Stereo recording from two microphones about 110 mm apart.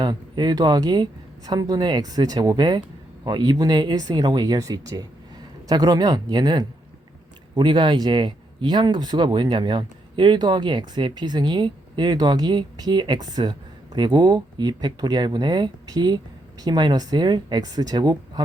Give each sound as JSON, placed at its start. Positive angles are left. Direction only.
{"t": 0.0, "sound": "speech", "side_deg": -40}